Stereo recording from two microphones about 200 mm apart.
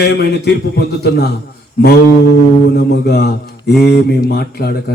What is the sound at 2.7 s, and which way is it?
Speech, 55° left (ahead or behind).